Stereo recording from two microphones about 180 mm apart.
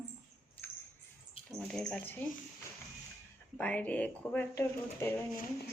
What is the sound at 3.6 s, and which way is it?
Speech, 10° left (ahead or behind).